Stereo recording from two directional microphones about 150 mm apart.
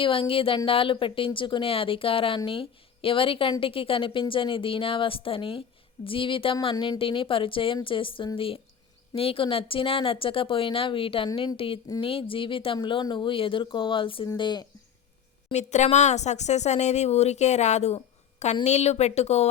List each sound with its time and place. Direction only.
0.0 s speech: 35° left (ahead or behind)
15.5 s speech: 50° left (ahead or behind)